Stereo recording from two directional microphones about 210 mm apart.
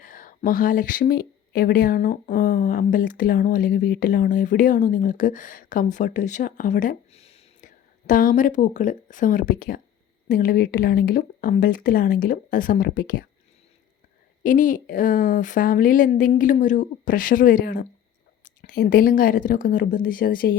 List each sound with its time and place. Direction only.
0.0 s speech: 40° left (ahead or behind)
14.4 s speech: 40° left (ahead or behind)